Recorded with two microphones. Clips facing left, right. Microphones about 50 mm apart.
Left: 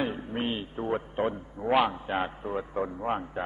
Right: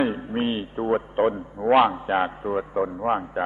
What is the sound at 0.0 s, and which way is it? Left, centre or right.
A man's voice, centre.